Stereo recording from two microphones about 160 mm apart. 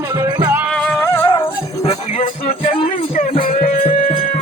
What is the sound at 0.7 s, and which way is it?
Music, 5° left (ahead or behind).